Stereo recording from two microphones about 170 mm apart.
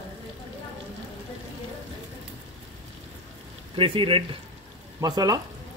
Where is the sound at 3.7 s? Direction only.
30° right (ahead or behind).